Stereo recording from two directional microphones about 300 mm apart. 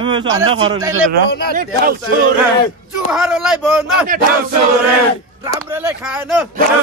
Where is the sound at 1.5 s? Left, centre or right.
Right.